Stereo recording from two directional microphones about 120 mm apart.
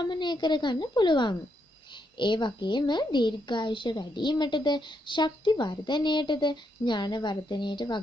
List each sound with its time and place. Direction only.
0.0 s a woman's voice: 40° left (ahead or behind)